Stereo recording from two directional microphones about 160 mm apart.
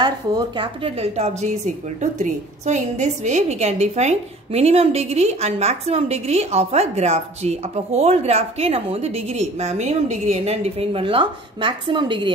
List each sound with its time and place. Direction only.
0.0 s a woman's voice: 30° right (ahead or behind)